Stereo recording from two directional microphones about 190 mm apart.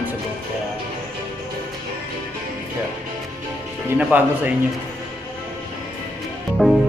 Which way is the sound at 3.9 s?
10° right (ahead or behind).